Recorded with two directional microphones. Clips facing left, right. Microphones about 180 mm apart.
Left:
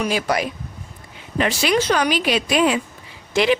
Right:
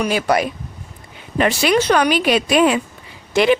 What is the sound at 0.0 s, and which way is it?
A woman's voice, 55° right (ahead or behind).